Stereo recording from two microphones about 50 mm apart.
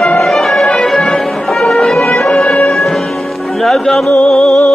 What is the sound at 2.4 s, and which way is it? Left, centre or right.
Music, left.